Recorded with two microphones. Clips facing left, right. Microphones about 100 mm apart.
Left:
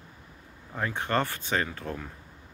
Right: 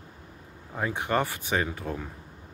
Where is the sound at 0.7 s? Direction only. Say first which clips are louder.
Right 1 dB; 15° right (ahead or behind).